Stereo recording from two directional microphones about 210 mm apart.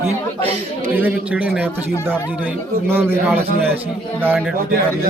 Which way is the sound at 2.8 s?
10° right (ahead or behind).